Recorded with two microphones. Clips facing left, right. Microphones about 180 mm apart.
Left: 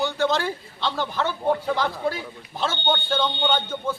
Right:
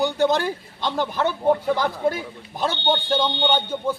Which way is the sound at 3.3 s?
15° right (ahead or behind).